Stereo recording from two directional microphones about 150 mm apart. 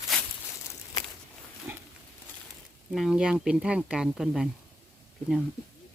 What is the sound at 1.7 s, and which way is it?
Pig, 15° right (ahead or behind).